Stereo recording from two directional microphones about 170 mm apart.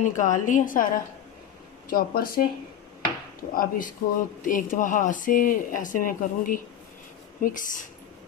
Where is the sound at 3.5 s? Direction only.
55° left (ahead or behind).